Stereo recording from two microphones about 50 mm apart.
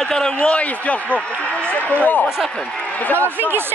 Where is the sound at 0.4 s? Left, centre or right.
Left.